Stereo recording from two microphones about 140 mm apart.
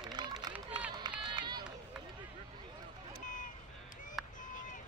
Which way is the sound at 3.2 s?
65° left (ahead or behind).